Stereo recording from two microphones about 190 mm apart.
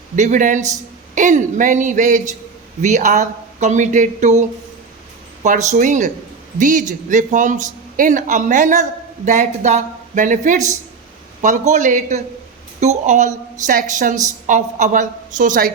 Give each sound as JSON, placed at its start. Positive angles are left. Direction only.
{"t": 0.2, "sound": "a man's voice", "side_deg": -40}